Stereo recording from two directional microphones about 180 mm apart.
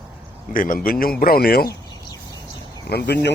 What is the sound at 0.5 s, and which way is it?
A man's voice, 50° left (ahead or behind).